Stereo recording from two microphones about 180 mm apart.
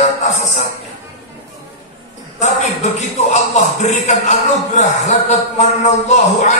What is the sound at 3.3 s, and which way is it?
A man's voice, 40° left (ahead or behind).